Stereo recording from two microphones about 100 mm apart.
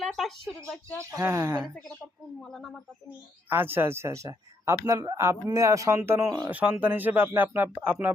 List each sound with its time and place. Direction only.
0.0 s a sound: centre (ahead or behind)
1.2 s speech: 25° right (ahead or behind)
2.4 s speech: 5° left (ahead or behind)
3.5 s speech: 20° right (ahead or behind)
6.5 s speech: 15° right (ahead or behind)